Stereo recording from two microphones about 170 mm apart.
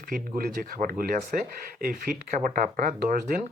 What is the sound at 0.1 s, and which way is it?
Speech, 60° right (ahead or behind).